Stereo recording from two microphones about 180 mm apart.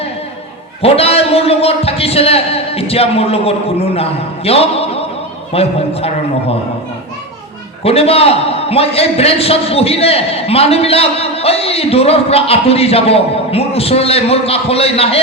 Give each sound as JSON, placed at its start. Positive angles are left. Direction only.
{"t": 0.8, "sound": "a man's voice", "side_deg": 35}
{"t": 7.9, "sound": "a man's voice", "side_deg": 35}